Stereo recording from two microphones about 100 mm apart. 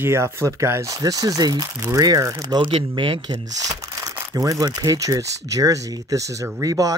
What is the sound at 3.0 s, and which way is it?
Speech, 55° right (ahead or behind).